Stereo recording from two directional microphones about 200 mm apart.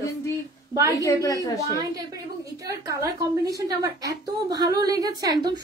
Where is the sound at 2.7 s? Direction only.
15° right (ahead or behind).